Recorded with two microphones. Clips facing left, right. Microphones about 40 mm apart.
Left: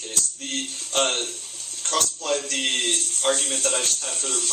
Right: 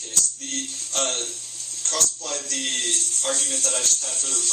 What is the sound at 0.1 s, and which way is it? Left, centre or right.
A man's voice, left.